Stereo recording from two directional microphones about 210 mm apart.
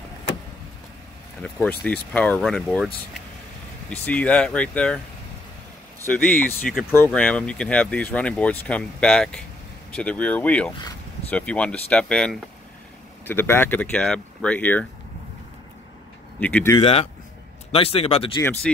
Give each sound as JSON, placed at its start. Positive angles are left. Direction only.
{"t": 1.4, "sound": "speech", "side_deg": 5}
{"t": 3.9, "sound": "speech", "side_deg": 5}
{"t": 6.2, "sound": "speech", "side_deg": 5}
{"t": 16.3, "sound": "speech", "side_deg": 5}
{"t": 16.8, "sound": "speech", "side_deg": 30}
{"t": 18.4, "sound": "speech", "side_deg": 10}